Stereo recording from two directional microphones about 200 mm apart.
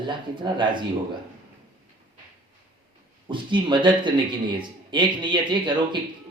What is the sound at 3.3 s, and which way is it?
A man's voice, 25° right (ahead or behind).